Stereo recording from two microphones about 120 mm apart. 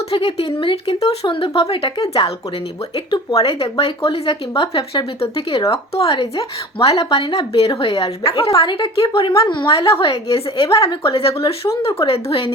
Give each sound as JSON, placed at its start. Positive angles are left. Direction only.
{"t": 0.1, "sound": "speech", "side_deg": 55}
{"t": 3.3, "sound": "speech", "side_deg": 50}